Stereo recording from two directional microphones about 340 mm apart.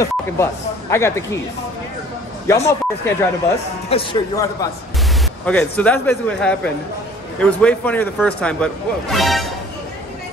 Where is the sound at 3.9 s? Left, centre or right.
Centre.